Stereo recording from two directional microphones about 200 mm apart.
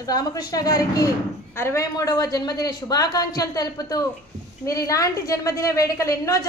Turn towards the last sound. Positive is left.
turn(degrees=15)  # may be behind; listen again after turning